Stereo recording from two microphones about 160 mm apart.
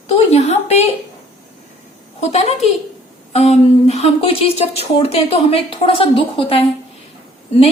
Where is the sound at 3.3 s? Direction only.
40° left (ahead or behind).